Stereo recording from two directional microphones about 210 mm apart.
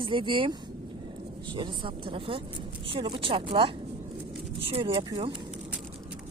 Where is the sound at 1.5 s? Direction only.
25° right (ahead or behind).